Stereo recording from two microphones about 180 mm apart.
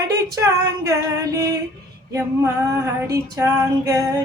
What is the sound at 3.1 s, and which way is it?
Music, 15° right (ahead or behind).